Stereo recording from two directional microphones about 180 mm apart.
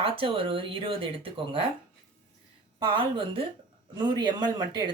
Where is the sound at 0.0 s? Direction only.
30° right (ahead or behind).